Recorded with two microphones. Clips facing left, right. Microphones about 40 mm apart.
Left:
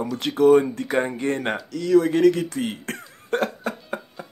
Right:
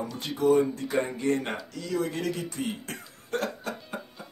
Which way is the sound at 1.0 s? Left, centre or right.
Left.